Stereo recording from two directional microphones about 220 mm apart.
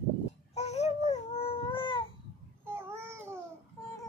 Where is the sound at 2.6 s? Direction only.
10° right (ahead or behind).